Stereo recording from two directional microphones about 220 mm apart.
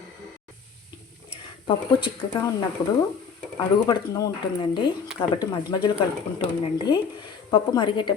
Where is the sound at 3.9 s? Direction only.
15° left (ahead or behind).